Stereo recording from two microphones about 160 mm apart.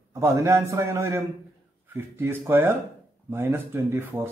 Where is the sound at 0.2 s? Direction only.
20° right (ahead or behind).